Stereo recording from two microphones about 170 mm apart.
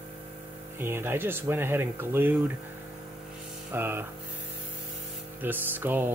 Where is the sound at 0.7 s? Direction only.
15° right (ahead or behind).